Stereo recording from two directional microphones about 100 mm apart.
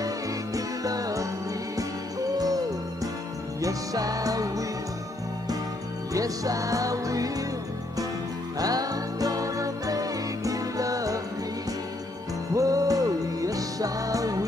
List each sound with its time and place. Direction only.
0.6 s music: 35° right (ahead or behind)
2.3 s hoot: 40° right (ahead or behind)
3.6 s music: 35° right (ahead or behind)
6.1 s music: 35° right (ahead or behind)
8.5 s music: 40° right (ahead or behind)
12.5 s music: 35° right (ahead or behind)